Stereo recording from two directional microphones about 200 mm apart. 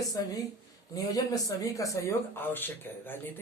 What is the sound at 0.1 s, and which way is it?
Speech, 15° left (ahead or behind).